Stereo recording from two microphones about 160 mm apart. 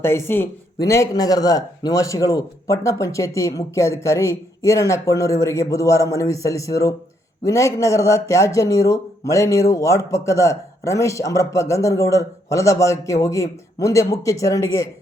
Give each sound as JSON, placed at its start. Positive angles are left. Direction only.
{"t": 0.0, "sound": "speech", "side_deg": 15}